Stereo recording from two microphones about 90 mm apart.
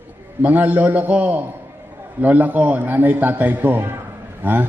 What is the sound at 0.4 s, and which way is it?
A man's voice, 20° right (ahead or behind).